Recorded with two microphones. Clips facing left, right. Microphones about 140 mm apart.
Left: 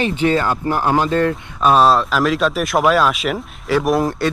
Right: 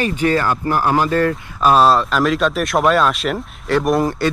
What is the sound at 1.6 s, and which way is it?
Speech, centre (ahead or behind).